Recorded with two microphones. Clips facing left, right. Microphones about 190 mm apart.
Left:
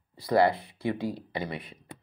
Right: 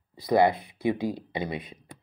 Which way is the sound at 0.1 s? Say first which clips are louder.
Right 2 dB; 15° right (ahead or behind).